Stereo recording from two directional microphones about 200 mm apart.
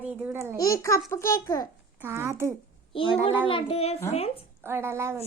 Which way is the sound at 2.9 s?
25° left (ahead or behind).